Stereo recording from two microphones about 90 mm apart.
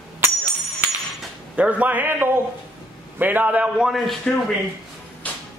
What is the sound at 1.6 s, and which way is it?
A man's voice, 15° right (ahead or behind).